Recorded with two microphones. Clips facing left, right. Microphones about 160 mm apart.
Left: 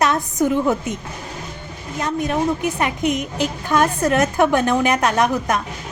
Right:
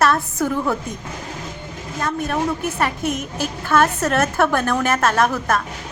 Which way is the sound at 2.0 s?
20° left (ahead or behind).